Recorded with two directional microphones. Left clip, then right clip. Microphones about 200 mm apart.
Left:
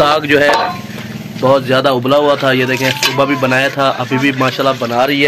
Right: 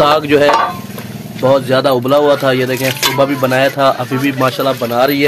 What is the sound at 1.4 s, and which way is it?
A man's voice, centre (ahead or behind).